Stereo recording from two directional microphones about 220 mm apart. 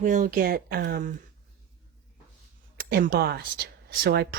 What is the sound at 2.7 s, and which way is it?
Speech, 45° right (ahead or behind).